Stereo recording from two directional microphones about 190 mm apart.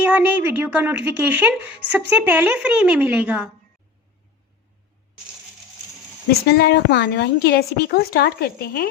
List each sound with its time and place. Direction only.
0.1 s speech: 10° right (ahead or behind)
6.5 s a woman's voice: 55° left (ahead or behind)